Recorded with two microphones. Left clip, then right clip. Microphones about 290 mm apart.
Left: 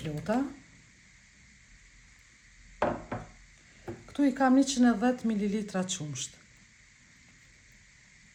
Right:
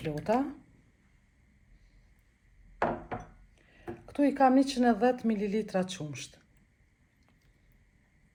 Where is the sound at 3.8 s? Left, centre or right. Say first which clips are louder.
Even; centre.